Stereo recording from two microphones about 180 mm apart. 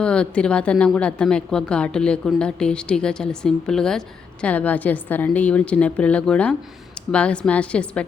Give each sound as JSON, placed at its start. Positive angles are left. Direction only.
{"t": 0.0, "sound": "a woman's voice", "side_deg": 5}